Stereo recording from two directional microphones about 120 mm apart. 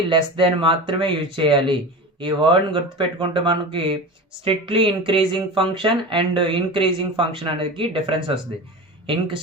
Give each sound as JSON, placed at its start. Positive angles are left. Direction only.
{"t": 0.1, "sound": "speech", "side_deg": -45}